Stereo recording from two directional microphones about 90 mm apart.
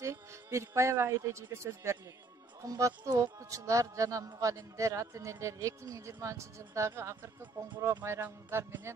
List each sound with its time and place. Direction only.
0.0 s a man's voice: 30° right (ahead or behind)